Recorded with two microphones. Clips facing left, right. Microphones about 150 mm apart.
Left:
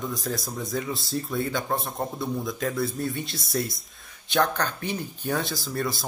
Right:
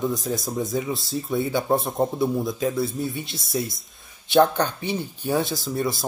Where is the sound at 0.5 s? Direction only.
25° right (ahead or behind).